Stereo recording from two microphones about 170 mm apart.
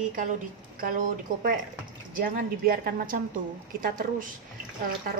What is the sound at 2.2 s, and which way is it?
A woman's voice, 60° right (ahead or behind).